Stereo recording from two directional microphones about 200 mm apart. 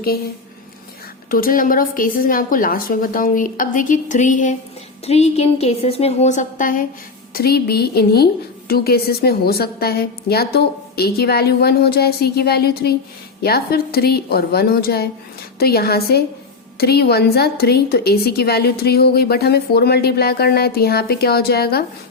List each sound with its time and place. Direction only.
1.3 s a woman's voice: 45° left (ahead or behind)